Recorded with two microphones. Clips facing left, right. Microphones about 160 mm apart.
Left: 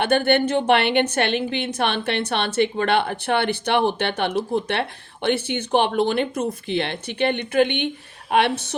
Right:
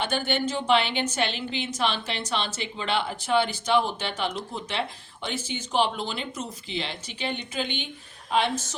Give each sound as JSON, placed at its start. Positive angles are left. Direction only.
{"t": 0.0, "sound": "a woman's voice", "side_deg": 60}